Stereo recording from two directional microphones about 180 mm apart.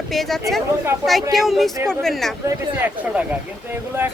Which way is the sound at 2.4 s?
10° right (ahead or behind).